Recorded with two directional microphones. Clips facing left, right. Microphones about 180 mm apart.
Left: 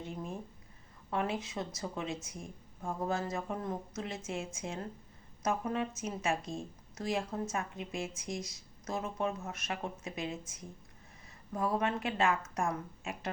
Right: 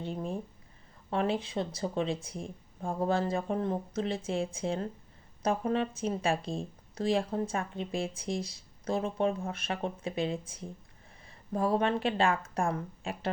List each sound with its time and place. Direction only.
0.0 s speech: 30° right (ahead or behind)